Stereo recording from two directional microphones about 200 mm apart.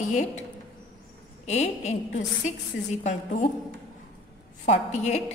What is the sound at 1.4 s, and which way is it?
A woman's voice, 35° left (ahead or behind).